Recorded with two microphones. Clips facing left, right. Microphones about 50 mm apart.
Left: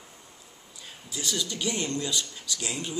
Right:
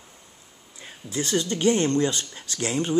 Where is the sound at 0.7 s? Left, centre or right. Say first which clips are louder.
Right 9 dB; right.